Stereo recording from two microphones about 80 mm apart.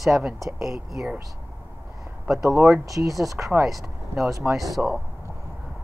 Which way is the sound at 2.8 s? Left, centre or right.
Right.